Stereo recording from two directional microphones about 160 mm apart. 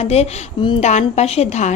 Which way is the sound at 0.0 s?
40° left (ahead or behind).